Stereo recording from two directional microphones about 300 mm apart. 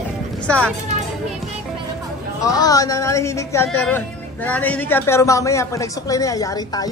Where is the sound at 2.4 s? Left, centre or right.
Centre.